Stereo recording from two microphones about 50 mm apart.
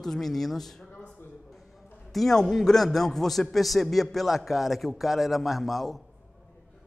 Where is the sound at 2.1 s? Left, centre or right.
Centre.